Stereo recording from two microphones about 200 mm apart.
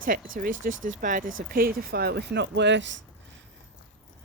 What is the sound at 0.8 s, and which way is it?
Speech, 40° right (ahead or behind).